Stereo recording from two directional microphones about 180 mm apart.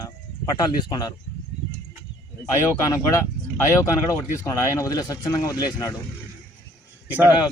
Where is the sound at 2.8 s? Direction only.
15° left (ahead or behind).